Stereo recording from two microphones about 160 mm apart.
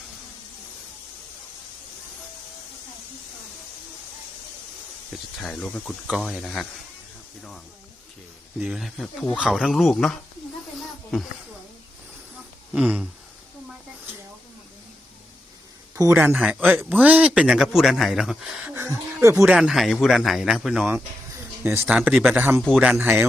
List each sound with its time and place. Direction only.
5.1 s speech: 5° left (ahead or behind)
6.1 s speech: 5° right (ahead or behind)
8.5 s speech: 5° right (ahead or behind)
12.7 s speech: 5° right (ahead or behind)
16.0 s a man's voice: 15° right (ahead or behind)
18.7 s a sound: 15° right (ahead or behind)
19.5 s speech: centre (ahead or behind)
21.8 s speech: 5° right (ahead or behind)
22.4 s a man's voice: 15° right (ahead or behind)